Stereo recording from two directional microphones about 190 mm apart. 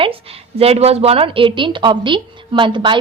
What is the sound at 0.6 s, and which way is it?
A woman's voice, 30° right (ahead or behind).